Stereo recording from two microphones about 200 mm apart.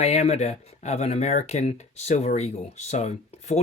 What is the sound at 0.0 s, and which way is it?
Speech, 35° left (ahead or behind).